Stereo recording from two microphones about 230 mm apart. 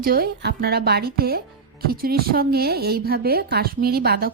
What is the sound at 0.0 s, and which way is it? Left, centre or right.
A woman's voice, right.